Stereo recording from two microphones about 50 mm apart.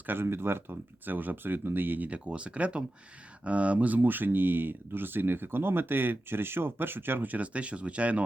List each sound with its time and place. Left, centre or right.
0.0 s speech: right
2.0 s speech: right